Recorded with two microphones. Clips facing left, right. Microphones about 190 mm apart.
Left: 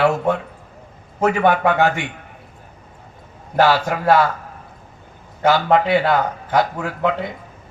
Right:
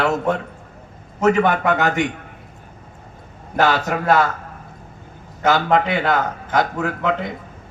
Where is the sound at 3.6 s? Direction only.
50° right (ahead or behind).